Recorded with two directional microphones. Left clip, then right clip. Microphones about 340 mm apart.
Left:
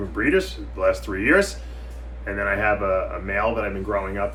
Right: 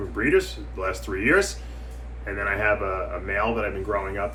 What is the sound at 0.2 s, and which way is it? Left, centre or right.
Speech, centre.